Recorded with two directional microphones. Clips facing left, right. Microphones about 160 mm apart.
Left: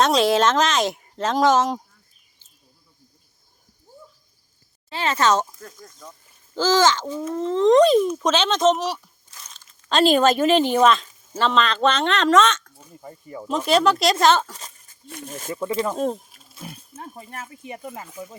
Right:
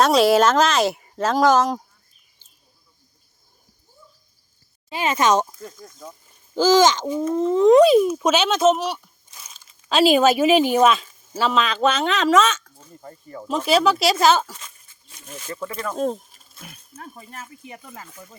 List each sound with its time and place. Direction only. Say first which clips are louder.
0.0 s speech: right 2 dB; 5° right (ahead or behind)
4.9 s speech: right 1 dB; 15° right (ahead or behind)
12.8 s speech: even; 10° left (ahead or behind)
13.7 s speech: even; 5° right (ahead or behind)
14.5 s a sound: left 1 dB; 35° left (ahead or behind)
15.0 s speech: left 4 dB; 55° left (ahead or behind)
15.7 s speech: left 8 dB; 20° left (ahead or behind)
16.0 s speech: even; centre (ahead or behind)
16.6 s speech: left 4 dB; 25° left (ahead or behind)